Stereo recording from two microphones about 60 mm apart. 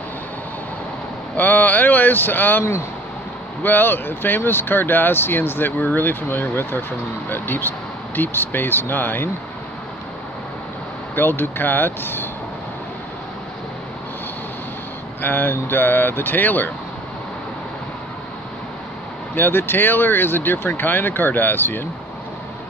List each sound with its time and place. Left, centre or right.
1.3 s speech: left
3.6 s speech: left
11.1 s speech: left
15.2 s speech: left
19.3 s speech: left